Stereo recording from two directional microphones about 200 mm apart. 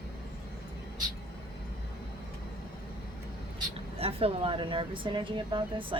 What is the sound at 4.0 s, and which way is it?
Speech, 30° right (ahead or behind).